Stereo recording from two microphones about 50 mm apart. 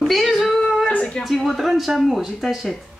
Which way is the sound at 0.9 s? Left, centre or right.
Left.